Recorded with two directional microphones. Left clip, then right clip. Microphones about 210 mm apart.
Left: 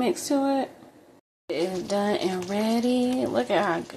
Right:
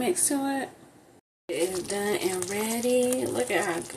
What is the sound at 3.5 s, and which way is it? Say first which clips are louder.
Speech: left 5 dB; 20° left (ahead or behind).